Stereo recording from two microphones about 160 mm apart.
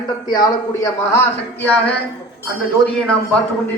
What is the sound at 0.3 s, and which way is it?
Speech, 25° left (ahead or behind).